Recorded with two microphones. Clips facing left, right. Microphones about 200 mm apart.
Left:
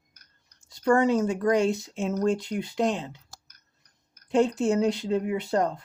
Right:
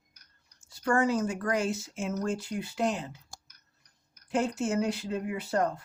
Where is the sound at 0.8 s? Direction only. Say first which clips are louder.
Left 5 dB; 25° left (ahead or behind).